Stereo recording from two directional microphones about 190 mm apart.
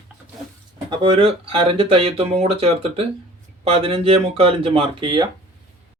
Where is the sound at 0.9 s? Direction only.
25° right (ahead or behind).